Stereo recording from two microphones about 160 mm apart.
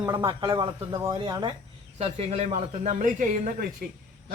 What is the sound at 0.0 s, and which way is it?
Speech, 20° right (ahead or behind).